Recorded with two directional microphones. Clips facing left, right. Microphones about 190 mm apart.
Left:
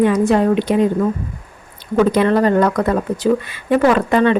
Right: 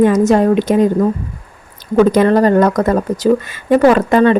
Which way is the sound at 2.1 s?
40° right (ahead or behind).